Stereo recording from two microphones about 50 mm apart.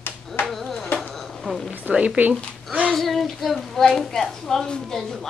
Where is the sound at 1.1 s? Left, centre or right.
Centre.